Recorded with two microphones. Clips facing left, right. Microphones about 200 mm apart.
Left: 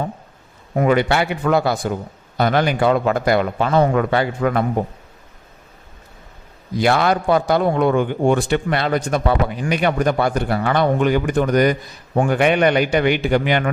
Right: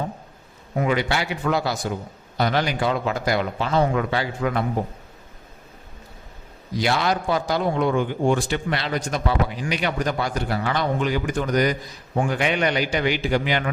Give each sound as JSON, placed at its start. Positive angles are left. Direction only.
{"t": 0.8, "sound": "a man's voice", "side_deg": 55}
{"t": 6.7, "sound": "a man's voice", "side_deg": 55}